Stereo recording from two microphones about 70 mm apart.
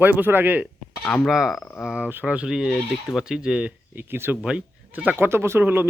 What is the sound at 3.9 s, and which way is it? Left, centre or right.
Speech, right.